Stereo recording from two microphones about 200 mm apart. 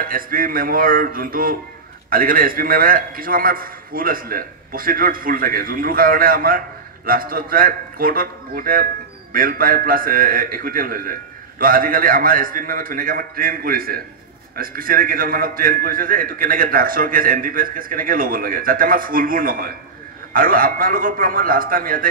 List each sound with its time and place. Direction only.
0.0 s a man's voice: 45° right (ahead or behind)